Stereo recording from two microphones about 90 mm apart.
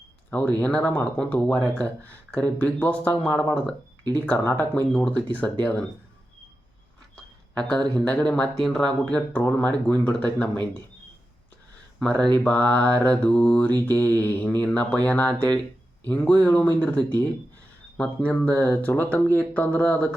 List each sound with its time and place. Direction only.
0.3 s speech: 15° left (ahead or behind)
7.5 s speech: 10° left (ahead or behind)
9.4 s speech: 20° left (ahead or behind)
11.9 s speech: 10° left (ahead or behind)